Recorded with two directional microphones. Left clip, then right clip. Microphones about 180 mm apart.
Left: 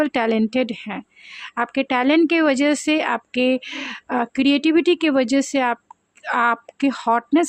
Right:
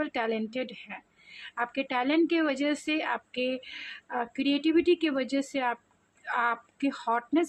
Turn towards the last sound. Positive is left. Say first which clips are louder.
# left 9 dB
turn(degrees=45)  # may be behind; listen again after turning